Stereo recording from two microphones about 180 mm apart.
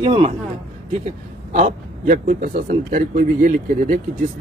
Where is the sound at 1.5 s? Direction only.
45° right (ahead or behind).